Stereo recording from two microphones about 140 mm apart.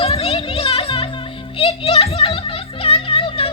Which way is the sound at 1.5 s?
40° left (ahead or behind).